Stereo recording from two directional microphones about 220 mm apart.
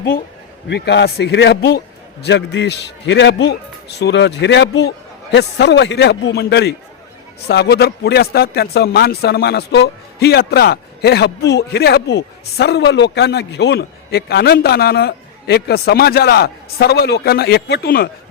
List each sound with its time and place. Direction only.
0.7 s a man's voice: 50° left (ahead or behind)